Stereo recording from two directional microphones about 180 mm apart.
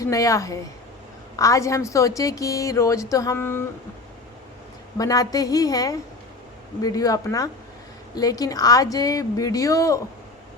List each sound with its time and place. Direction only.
0.0 s a woman's voice: 20° left (ahead or behind)
4.9 s a woman's voice: 20° left (ahead or behind)